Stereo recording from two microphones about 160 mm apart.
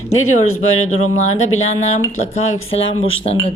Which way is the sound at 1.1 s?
45° left (ahead or behind).